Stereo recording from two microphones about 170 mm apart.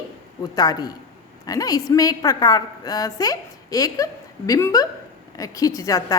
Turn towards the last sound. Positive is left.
turn(degrees=20)  # may be behind; listen again after turning